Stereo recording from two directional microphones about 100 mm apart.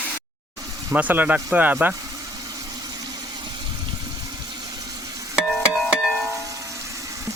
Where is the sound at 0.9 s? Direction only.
15° right (ahead or behind).